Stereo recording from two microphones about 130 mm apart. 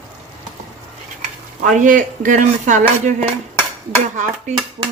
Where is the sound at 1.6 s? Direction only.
90° right; by 3.3 s 70° right (ahead or behind).